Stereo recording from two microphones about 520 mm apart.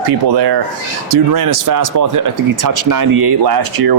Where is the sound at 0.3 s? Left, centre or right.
Right.